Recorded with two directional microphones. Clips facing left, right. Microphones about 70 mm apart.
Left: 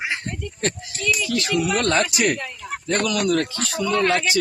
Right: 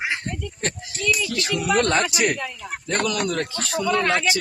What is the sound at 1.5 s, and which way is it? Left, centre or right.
Speech, right.